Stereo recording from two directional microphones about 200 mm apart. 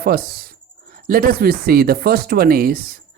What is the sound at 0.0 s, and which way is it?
Speech, 50° right (ahead or behind).